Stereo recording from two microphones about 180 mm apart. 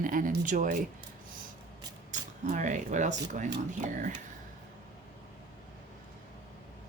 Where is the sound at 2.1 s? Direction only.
45° right (ahead or behind).